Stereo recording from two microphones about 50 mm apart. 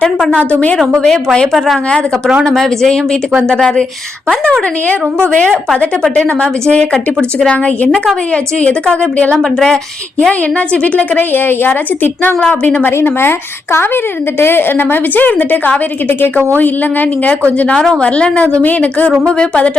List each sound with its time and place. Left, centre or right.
0.5 s speech: left
1.0 s speech: centre
1.5 s a woman's voice: centre
2.4 s speech: centre
6.2 s a woman's voice: left
9.4 s speech: centre
10.7 s a woman's voice: left
11.2 s a woman's voice: left
18.0 s a woman's voice: left
18.6 s a woman's voice: left